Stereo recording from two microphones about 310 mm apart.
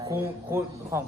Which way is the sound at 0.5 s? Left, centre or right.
Centre.